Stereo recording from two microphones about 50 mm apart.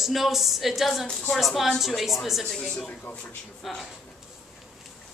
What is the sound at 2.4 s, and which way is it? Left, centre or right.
A woman's voice, centre.